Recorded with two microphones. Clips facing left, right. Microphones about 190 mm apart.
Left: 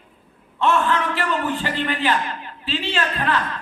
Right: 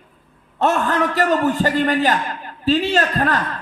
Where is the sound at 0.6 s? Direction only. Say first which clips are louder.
Right 2 dB; 40° right (ahead or behind).